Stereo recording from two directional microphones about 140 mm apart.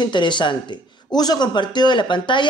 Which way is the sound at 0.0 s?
35° left (ahead or behind).